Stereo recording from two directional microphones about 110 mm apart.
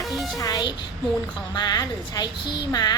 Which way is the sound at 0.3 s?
35° left (ahead or behind).